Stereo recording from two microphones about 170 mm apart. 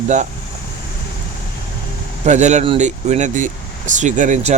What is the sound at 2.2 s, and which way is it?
Speech, 45° right (ahead or behind).